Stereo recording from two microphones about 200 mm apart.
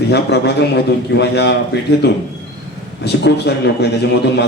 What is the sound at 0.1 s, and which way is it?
Speech, 55° left (ahead or behind).